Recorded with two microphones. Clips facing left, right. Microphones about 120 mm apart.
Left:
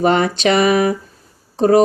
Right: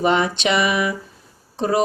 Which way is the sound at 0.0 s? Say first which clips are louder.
Left 4 dB; 45° left (ahead or behind).